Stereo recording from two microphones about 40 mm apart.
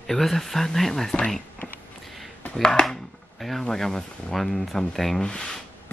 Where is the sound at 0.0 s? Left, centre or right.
Centre.